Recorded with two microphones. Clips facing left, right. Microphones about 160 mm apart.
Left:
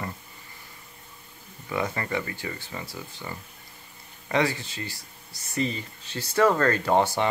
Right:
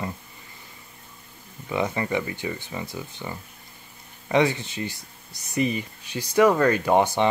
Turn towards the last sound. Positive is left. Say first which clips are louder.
# right 2 dB
turn(degrees=-15)  # may be behind; listen again after turning